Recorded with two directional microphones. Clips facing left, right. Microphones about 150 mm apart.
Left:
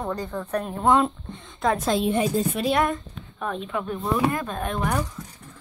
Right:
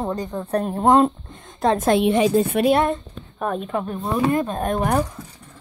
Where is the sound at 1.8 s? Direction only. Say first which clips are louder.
Right 5 dB; 60° right (ahead or behind).